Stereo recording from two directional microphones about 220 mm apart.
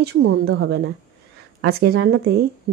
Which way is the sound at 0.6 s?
60° right (ahead or behind).